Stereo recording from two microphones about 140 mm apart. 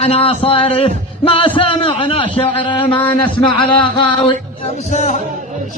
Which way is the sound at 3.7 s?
35° left (ahead or behind).